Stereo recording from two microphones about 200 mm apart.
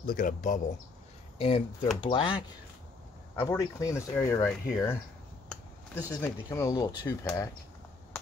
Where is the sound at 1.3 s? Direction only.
30° left (ahead or behind); by 4.6 s 5° left (ahead or behind).